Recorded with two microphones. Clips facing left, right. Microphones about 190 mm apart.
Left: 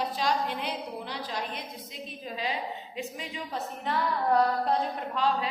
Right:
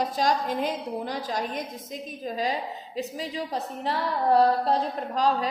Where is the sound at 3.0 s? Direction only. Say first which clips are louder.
Right 8 dB; 35° right (ahead or behind).